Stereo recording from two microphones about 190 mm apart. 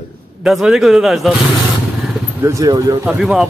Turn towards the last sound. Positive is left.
turn(degrees=0)  # may be behind; listen again after turning